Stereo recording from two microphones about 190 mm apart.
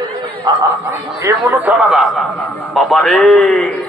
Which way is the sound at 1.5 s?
Centre (ahead or behind).